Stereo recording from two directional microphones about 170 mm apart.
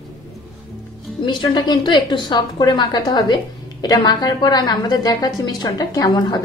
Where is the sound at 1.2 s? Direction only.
25° left (ahead or behind).